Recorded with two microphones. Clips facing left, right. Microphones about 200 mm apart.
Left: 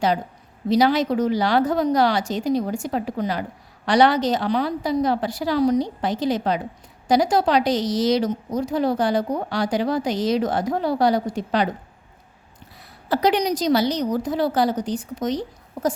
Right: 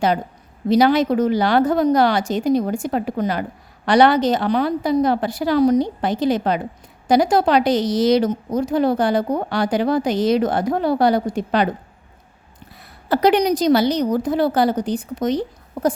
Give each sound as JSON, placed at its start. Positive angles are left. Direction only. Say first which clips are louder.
{"t": 0.7, "sound": "a woman's voice", "louder": "right 3 dB", "side_deg": -55}
{"t": 13.1, "sound": "a woman's voice", "louder": "right 4 dB", "side_deg": -60}